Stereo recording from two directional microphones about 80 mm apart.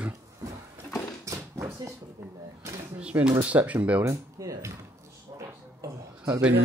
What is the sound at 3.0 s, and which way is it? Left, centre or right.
Cutlery, centre.